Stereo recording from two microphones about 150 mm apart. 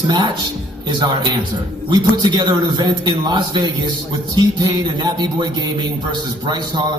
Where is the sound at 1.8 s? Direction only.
30° right (ahead or behind).